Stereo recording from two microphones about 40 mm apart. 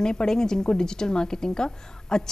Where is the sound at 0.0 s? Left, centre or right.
Centre.